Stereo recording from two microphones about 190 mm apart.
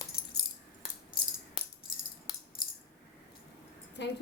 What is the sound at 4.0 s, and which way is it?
Speech, 65° left (ahead or behind).